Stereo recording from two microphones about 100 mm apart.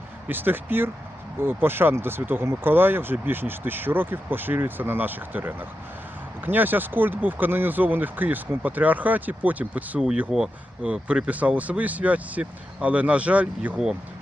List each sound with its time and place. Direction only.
0.3 s speech: 20° right (ahead or behind)